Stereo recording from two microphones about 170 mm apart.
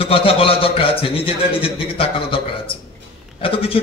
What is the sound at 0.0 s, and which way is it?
A man's voice, 35° left (ahead or behind).